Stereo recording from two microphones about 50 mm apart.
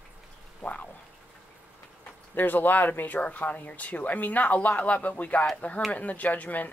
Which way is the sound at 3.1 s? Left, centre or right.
Left.